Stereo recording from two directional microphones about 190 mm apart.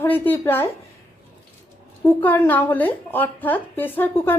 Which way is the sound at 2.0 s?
10° left (ahead or behind).